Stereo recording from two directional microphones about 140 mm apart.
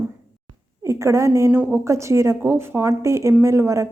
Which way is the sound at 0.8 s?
20° right (ahead or behind).